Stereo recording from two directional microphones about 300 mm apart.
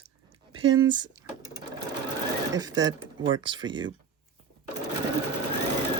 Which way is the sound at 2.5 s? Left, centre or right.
Centre.